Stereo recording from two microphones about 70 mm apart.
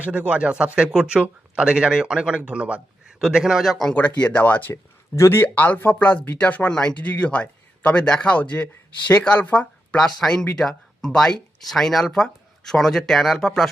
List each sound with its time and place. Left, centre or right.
0.0 s speech: right; by 3.9 s centre
3.9 s speech: left
4.7 s speech: left
6.7 s speech: centre
10.0 s speech: centre